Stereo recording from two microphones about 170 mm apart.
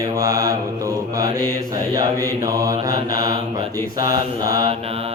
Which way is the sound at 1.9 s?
20° right (ahead or behind).